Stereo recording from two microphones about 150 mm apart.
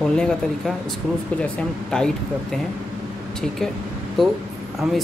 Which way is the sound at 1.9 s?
5° left (ahead or behind).